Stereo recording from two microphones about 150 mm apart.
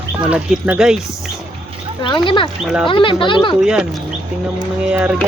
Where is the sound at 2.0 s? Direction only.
30° left (ahead or behind).